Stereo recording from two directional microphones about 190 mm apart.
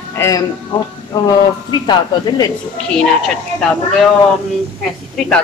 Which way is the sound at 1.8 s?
20° left (ahead or behind).